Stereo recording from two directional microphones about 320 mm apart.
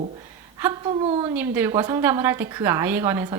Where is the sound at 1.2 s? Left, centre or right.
Centre.